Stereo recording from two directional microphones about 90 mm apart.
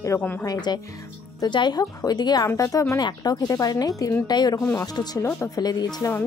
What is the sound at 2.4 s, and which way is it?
Speech, 35° left (ahead or behind).